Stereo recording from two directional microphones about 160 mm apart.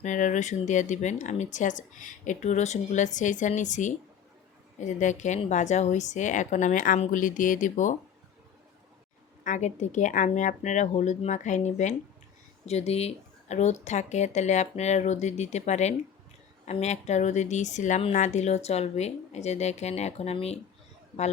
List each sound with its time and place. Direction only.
0.0 s speech: 50° left (ahead or behind)
9.4 s speech: 50° left (ahead or behind)